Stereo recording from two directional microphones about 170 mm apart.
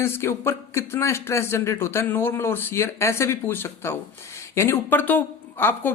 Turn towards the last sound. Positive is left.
turn(degrees=10)  # may be behind; listen again after turning